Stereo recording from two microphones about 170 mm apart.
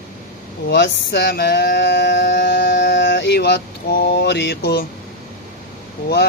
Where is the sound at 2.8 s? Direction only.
90° left; by 4.8 s 70° left (ahead or behind).